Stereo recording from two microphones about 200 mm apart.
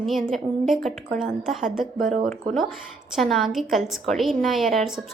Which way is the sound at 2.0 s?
40° right (ahead or behind).